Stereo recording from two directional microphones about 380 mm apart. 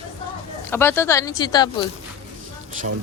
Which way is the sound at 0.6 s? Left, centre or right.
Centre.